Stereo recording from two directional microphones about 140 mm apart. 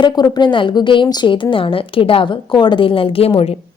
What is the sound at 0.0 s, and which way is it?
A woman's voice, 30° left (ahead or behind).